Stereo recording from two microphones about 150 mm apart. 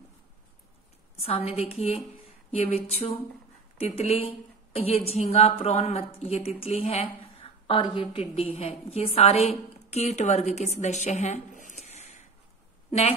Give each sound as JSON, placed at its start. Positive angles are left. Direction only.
{"t": 1.2, "sound": "a woman's voice", "side_deg": 40}